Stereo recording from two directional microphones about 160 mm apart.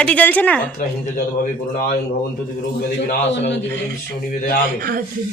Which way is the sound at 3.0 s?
90° left.